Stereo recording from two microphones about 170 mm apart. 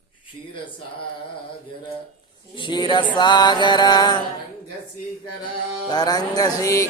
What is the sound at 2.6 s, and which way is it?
Music, 25° left (ahead or behind).